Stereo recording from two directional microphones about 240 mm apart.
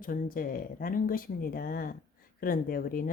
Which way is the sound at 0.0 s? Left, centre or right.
Left.